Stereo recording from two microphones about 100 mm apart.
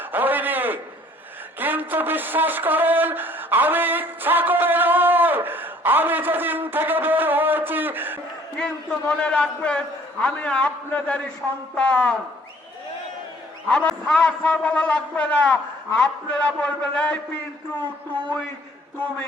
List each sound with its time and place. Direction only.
0.0 s a sound: 20° right (ahead or behind)
8.5 s a man's voice: 10° left (ahead or behind)
13.7 s a man's voice: 5° left (ahead or behind)